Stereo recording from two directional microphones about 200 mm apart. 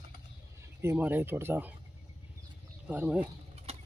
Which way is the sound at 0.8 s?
10° right (ahead or behind).